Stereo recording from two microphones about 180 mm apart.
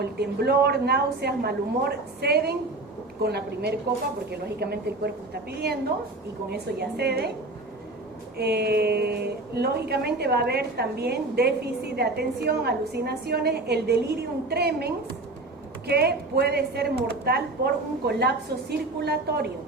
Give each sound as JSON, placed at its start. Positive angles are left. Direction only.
{"t": 0.0, "sound": "a woman's voice", "side_deg": -65}
{"t": 8.4, "sound": "a woman's voice", "side_deg": -65}